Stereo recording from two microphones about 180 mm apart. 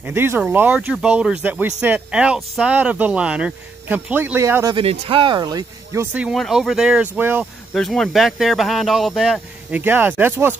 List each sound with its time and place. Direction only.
0.0 s speech: 10° right (ahead or behind)
4.7 s speech: 30° right (ahead or behind)
6.1 s speech: centre (ahead or behind)
7.7 s speech: centre (ahead or behind)